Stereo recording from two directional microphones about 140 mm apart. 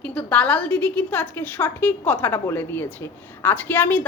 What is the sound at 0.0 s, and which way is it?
A woman's voice, 10° left (ahead or behind).